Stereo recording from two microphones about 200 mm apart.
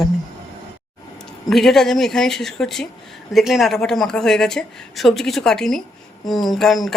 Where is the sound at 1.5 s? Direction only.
Centre (ahead or behind).